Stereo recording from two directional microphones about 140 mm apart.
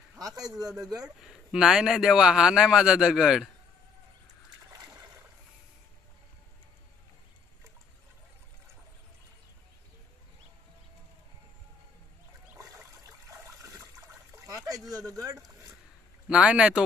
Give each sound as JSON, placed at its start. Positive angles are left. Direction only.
{"t": 0.4, "sound": "speech", "side_deg": -25}
{"t": 1.0, "sound": "speech", "side_deg": -5}
{"t": 12.5, "sound": "a sound", "side_deg": -25}
{"t": 13.6, "sound": "splash", "side_deg": -20}
{"t": 14.9, "sound": "a sound", "side_deg": -25}
{"t": 16.3, "sound": "speech", "side_deg": -5}